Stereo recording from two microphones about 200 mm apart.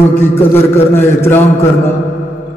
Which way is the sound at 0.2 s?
10° left (ahead or behind).